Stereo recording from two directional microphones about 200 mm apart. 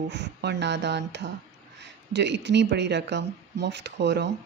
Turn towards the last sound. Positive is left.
turn(degrees=-60)  # may be behind; listen again after turning